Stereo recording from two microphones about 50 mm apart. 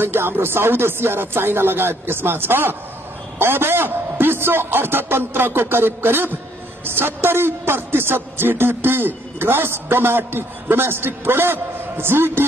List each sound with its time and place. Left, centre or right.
0.0 s a woman's voice: right